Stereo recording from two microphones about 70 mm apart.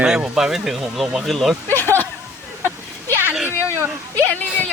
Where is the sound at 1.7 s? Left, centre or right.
Left.